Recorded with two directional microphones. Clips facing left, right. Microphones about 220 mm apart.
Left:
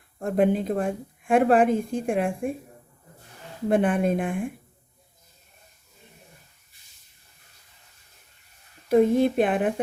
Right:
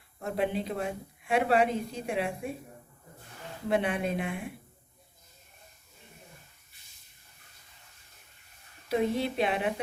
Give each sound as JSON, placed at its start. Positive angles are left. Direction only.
{"t": 0.2, "sound": "a woman's voice", "side_deg": 50}
{"t": 3.7, "sound": "a woman's voice", "side_deg": 50}
{"t": 8.9, "sound": "a woman's voice", "side_deg": 50}